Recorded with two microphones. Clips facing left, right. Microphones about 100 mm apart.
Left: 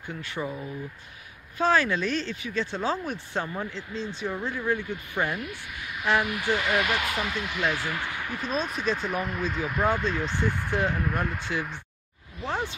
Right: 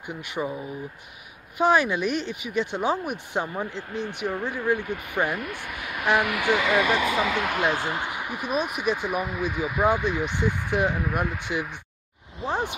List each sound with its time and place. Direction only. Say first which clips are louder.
0.0 s speech: right 3 dB; 15° right (ahead or behind)
4.7 s speech: right 3 dB; 60° right (ahead or behind)
5.1 s speech: right 3 dB; 15° right (ahead or behind)
5.4 s speech: right 4 dB; 55° right (ahead or behind)
6.1 s speech: right 3 dB; 70° right (ahead or behind)
7.6 s speech: right 3 dB; 20° right (ahead or behind)